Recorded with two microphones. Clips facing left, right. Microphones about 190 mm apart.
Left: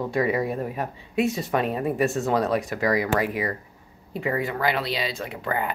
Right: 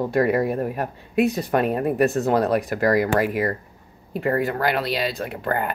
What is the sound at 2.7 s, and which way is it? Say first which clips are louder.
Speech: right 4 dB; 55° right (ahead or behind).